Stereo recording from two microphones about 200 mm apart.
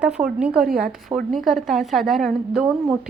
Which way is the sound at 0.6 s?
45° right (ahead or behind).